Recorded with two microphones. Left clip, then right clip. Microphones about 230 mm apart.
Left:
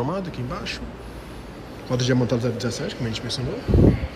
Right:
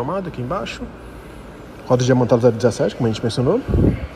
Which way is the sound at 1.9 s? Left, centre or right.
Centre.